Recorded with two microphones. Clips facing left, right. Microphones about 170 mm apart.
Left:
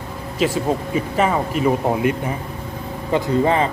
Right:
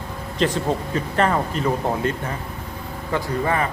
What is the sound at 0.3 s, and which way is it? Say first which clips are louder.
A man's voice: left 2 dB; 10° left (ahead or behind).